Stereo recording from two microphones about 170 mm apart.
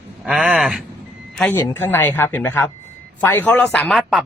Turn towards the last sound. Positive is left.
turn(degrees=0)  # may be behind; listen again after turning